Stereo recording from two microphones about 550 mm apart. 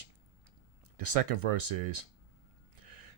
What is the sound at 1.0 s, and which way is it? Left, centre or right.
Speech, right.